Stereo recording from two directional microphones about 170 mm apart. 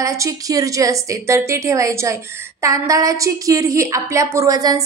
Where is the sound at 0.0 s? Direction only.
20° right (ahead or behind).